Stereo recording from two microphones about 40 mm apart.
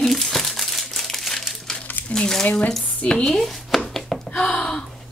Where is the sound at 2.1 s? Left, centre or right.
Centre.